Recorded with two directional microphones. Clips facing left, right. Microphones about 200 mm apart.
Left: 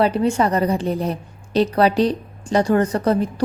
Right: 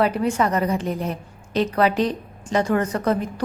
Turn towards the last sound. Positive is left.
turn(degrees=30)  # may be behind; listen again after turning